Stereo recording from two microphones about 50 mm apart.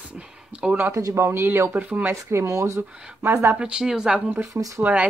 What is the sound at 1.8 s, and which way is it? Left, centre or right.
Speech, right.